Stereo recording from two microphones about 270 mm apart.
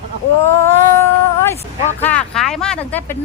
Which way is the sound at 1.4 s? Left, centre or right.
Centre.